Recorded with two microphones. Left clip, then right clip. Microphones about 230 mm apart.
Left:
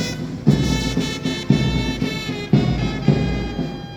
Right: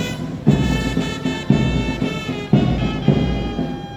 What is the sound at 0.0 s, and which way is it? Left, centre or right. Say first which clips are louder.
Music: right 1 dB; centre.